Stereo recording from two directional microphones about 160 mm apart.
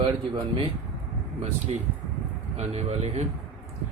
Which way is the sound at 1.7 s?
40° right (ahead or behind).